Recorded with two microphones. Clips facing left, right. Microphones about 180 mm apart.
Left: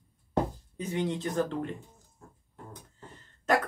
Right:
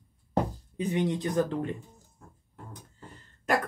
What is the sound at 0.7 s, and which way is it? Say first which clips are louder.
Speech: right 3 dB; 15° right (ahead or behind).